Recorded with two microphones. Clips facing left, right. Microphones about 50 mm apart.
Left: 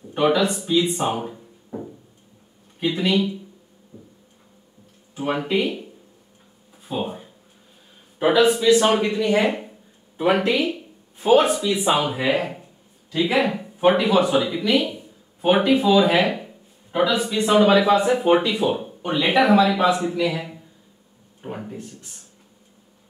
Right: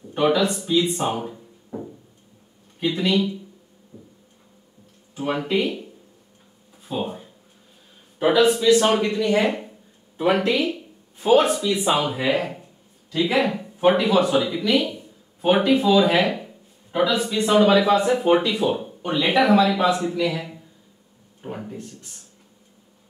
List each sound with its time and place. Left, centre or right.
0.1 s speech: centre
5.1 s speech: centre
6.7 s a sound: centre
8.2 s speech: centre